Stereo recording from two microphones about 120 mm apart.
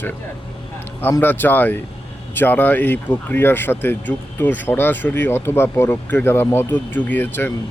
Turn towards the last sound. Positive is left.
turn(degrees=15)  # may be behind; listen again after turning